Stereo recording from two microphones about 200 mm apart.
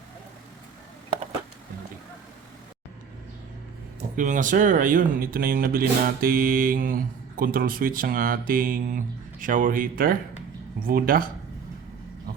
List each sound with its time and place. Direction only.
4.1 s speech: 40° right (ahead or behind)